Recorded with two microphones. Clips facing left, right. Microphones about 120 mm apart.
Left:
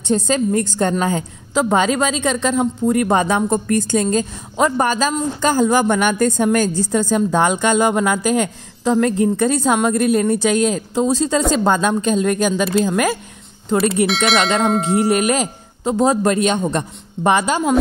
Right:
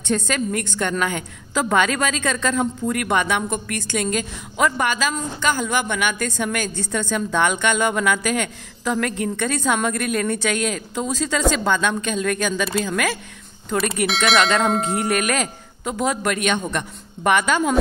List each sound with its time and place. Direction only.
0.1 s a woman's voice: 30° left (ahead or behind)
14.0 s a sound: centre (ahead or behind)
15.0 s a man's voice: 25° left (ahead or behind)